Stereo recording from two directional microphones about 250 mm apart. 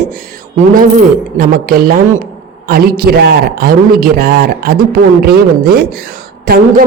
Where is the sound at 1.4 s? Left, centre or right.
Right.